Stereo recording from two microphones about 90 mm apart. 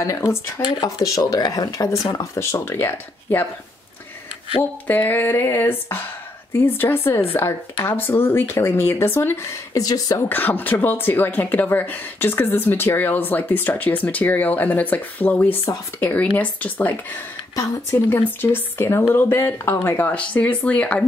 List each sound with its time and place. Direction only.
0.0 s speech: 35° left (ahead or behind)
2.1 s speech: 30° left (ahead or behind)
4.6 s speech: 20° left (ahead or behind); by 10.2 s 45° left (ahead or behind)
10.2 s speech: 20° left (ahead or behind)